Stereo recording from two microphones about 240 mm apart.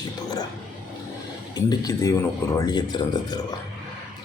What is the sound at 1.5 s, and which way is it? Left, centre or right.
Speech, centre.